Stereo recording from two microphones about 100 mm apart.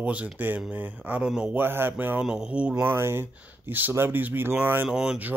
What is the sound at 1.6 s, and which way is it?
Speech, 20° right (ahead or behind).